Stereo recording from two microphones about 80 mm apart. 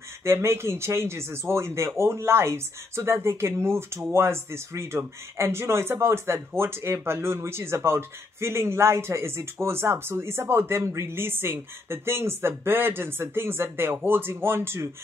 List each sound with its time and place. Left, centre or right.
0.2 s speech: right